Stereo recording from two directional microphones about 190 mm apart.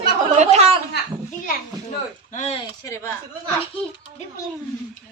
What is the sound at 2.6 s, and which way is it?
Speech, 15° left (ahead or behind).